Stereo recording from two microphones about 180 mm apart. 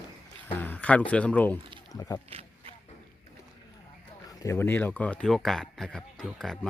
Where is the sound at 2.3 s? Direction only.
35° right (ahead or behind).